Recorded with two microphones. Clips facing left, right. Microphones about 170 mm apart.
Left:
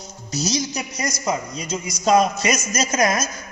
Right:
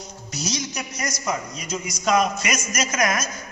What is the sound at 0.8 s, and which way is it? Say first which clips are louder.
A woman's voice: left 3 dB; 25° left (ahead or behind).